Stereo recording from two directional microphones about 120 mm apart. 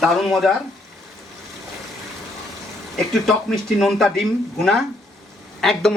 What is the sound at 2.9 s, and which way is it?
Speech, centre (ahead or behind).